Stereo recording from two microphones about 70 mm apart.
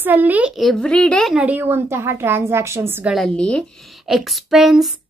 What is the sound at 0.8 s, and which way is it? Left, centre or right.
Speech, centre.